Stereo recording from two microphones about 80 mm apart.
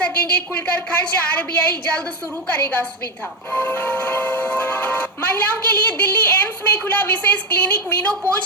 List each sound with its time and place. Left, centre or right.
0.0 s speech: centre